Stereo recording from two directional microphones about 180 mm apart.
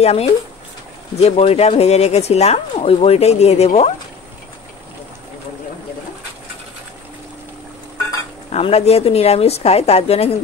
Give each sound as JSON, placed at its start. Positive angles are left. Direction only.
{"t": 0.0, "sound": "a woman's voice", "side_deg": 35}
{"t": 8.5, "sound": "a woman's voice", "side_deg": 35}